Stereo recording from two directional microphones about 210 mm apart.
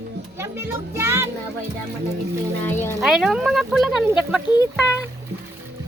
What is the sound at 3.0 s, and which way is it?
Speech, centre (ahead or behind).